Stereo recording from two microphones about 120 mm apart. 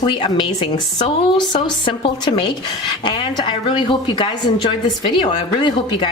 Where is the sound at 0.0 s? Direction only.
40° left (ahead or behind).